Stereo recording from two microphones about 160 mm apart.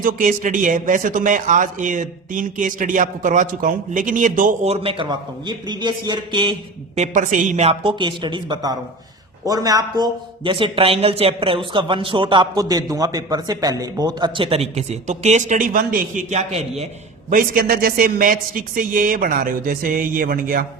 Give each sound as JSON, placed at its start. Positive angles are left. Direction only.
{"t": 0.0, "sound": "a man's voice", "side_deg": -55}
{"t": 4.7, "sound": "a man's voice", "side_deg": -35}
{"t": 6.9, "sound": "speech", "side_deg": -50}
{"t": 17.3, "sound": "a man's voice", "side_deg": -65}